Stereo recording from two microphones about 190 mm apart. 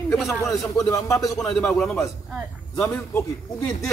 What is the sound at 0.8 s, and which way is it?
Speech, 15° left (ahead or behind).